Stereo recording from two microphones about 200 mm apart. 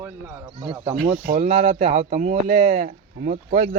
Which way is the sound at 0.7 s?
30° right (ahead or behind).